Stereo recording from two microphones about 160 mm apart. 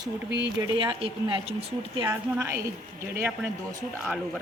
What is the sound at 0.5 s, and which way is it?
Speech, 30° right (ahead or behind).